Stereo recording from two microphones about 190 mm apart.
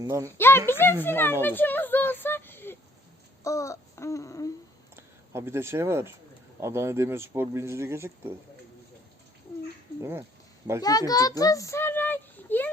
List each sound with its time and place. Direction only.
0.0 s speech: 15° right (ahead or behind)
0.3 s a sound: 10° left (ahead or behind)
1.0 s speech: 10° left (ahead or behind)
3.4 s a sound: 15° left (ahead or behind)
4.9 s speech: 15° right (ahead or behind)
10.0 s speech: 10° right (ahead or behind)
10.8 s a child's voice: 20° left (ahead or behind)